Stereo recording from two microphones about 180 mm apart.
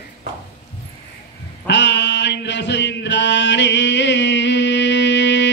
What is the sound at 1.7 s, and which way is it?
Chant, 75° left (ahead or behind).